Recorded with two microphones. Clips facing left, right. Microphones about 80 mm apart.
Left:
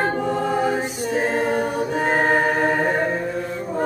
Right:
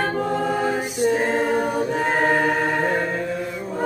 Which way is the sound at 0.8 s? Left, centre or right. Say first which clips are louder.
Right 2 dB; centre.